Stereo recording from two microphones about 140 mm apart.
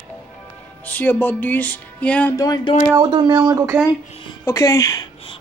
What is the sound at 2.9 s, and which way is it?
Speech, 35° right (ahead or behind).